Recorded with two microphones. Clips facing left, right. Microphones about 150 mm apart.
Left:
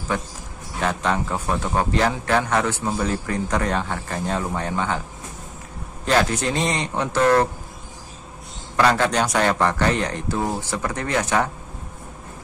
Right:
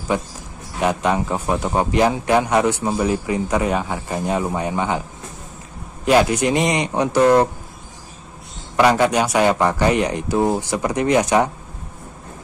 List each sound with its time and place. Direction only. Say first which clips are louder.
0.1 s a man's voice: right 4 dB; 15° right (ahead or behind)
6.0 s a man's voice: right 5 dB; 10° right (ahead or behind)
8.7 s a man's voice: right 4 dB; 15° right (ahead or behind)